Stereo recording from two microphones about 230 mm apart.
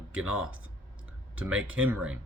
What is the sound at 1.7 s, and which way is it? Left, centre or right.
Speech, centre.